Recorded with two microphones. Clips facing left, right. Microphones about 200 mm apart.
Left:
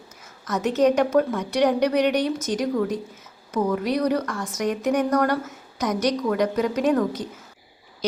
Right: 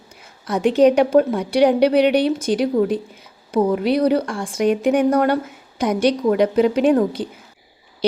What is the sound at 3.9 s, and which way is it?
Speech, 30° right (ahead or behind).